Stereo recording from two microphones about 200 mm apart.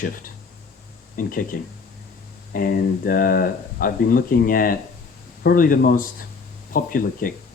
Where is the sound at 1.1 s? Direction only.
45° left (ahead or behind).